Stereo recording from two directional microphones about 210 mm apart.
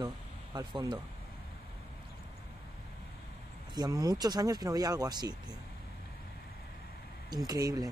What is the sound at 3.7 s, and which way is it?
Speech, 20° right (ahead or behind).